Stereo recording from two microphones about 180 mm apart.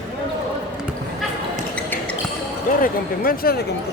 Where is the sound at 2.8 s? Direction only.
55° left (ahead or behind).